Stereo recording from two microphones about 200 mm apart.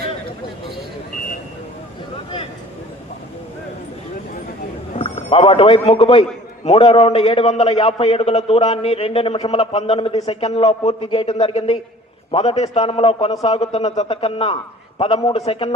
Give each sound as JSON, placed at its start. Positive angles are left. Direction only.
{"t": 4.9, "sound": "a man's voice", "side_deg": 30}